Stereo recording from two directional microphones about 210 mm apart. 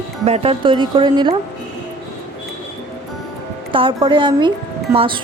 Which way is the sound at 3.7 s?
25° right (ahead or behind).